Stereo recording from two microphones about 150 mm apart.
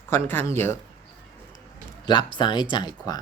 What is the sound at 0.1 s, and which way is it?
Speech, 15° left (ahead or behind).